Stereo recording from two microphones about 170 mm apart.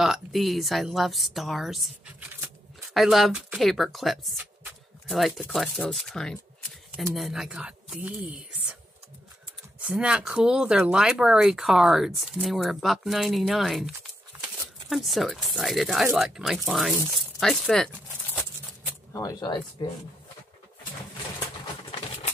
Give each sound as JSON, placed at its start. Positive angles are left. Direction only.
{"t": 0.0, "sound": "a woman's voice", "side_deg": 0}
{"t": 9.8, "sound": "speech", "side_deg": -5}
{"t": 17.4, "sound": "rattle", "side_deg": 0}
{"t": 19.1, "sound": "speech", "side_deg": 20}